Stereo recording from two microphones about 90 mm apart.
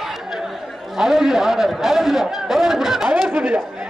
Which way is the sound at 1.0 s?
5° right (ahead or behind).